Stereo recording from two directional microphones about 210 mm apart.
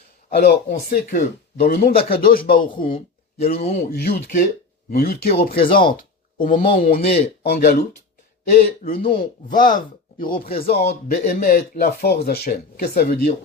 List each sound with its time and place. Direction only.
0.3 s speech: 50° left (ahead or behind); by 3.8 s 35° left (ahead or behind)
3.8 s speech: 45° left (ahead or behind)
6.0 s a sound: 40° left (ahead or behind)
6.7 s speech: 45° left (ahead or behind)
10.5 s speech: 30° left (ahead or behind)
11.1 s speech: 40° left (ahead or behind)